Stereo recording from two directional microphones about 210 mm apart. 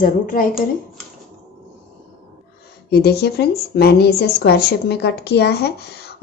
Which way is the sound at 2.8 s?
50° left (ahead or behind).